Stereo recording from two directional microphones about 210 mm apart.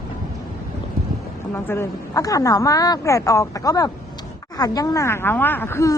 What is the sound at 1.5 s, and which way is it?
A woman's voice, 10° left (ahead or behind).